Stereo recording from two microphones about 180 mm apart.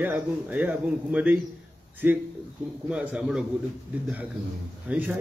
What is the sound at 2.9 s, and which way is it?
Speech, 5° right (ahead or behind).